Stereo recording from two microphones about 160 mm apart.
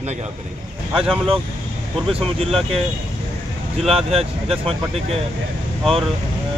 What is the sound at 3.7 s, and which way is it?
Speech, 40° right (ahead or behind).